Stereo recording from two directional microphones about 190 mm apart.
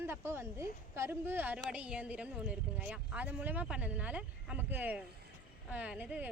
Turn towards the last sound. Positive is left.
turn(degrees=-5)  # may be behind; listen again after turning